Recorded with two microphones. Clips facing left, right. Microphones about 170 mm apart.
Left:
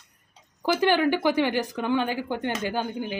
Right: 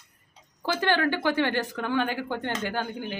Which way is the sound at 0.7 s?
15° left (ahead or behind).